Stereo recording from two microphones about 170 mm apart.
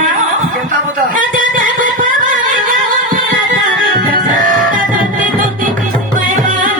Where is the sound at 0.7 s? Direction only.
55° right (ahead or behind).